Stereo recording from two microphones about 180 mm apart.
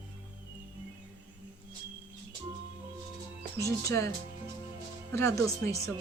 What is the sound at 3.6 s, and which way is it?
Speech, 15° left (ahead or behind).